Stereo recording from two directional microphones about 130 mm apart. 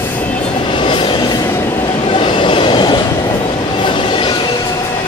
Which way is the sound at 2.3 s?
40° left (ahead or behind).